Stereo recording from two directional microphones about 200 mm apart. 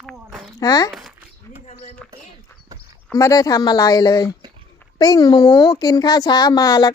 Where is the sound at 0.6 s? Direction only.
20° left (ahead or behind).